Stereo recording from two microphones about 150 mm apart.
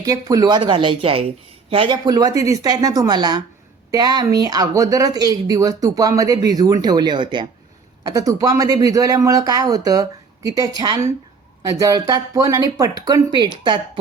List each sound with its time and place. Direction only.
0.0 s speech: 25° right (ahead or behind)